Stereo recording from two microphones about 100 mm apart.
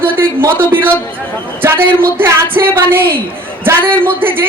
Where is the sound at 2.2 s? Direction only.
20° right (ahead or behind).